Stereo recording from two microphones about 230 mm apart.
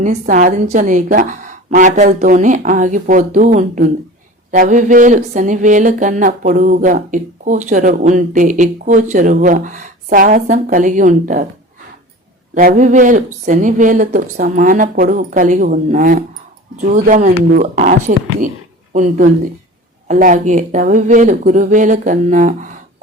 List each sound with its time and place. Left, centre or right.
0.0 s speech: right
12.5 s speech: right